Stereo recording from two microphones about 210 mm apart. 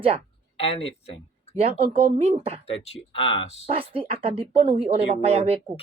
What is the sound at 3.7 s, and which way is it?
Speech, 25° right (ahead or behind).